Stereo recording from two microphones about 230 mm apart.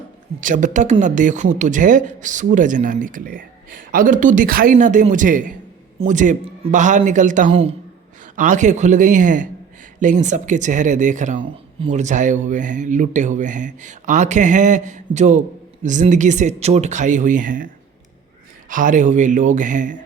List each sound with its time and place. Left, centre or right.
0.3 s a woman's voice: right
18.7 s a woman's voice: right